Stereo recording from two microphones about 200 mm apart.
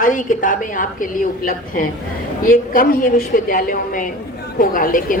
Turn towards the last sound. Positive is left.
turn(degrees=45)  # may be behind; listen again after turning